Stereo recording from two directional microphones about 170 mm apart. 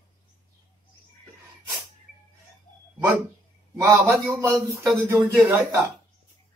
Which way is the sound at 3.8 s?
15° right (ahead or behind).